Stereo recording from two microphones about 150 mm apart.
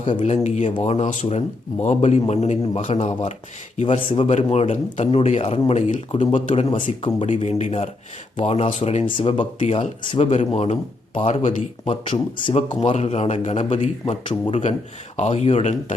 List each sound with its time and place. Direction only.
0.2 s a man's voice: 50° left (ahead or behind)
6.7 s speech: 35° left (ahead or behind)
7.3 s a man's voice: 50° left (ahead or behind)
14.1 s speech: 35° left (ahead or behind)
14.5 s a man's voice: 50° left (ahead or behind)